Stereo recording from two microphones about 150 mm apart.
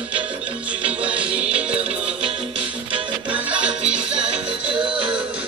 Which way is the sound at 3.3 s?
10° right (ahead or behind).